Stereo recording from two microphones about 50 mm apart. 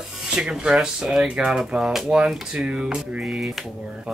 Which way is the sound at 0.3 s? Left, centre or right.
Centre.